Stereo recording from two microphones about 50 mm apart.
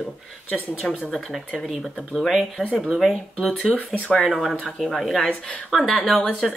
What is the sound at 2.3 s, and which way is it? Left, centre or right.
Speech, centre.